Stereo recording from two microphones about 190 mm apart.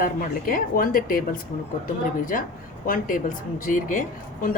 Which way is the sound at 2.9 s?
45° left (ahead or behind).